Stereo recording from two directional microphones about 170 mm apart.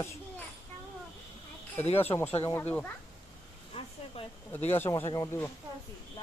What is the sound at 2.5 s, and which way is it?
Speech, 10° left (ahead or behind).